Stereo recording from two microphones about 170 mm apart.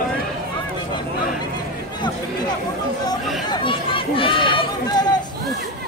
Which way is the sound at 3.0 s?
30° left (ahead or behind).